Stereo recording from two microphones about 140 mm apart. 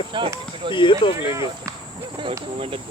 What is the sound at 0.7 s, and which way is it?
Speech, 35° left (ahead or behind).